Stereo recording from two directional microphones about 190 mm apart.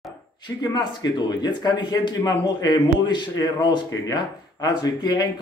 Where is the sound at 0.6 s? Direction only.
20° left (ahead or behind).